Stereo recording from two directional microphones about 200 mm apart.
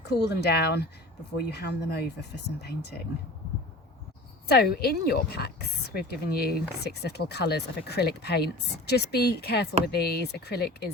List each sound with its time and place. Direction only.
0.0 s speech: 55° left (ahead or behind)
4.4 s speech: 50° left (ahead or behind)